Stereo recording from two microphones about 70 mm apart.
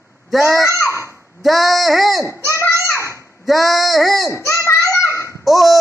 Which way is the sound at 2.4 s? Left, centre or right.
Left.